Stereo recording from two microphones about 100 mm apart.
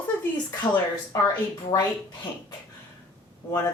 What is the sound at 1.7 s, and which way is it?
Speech, 30° left (ahead or behind).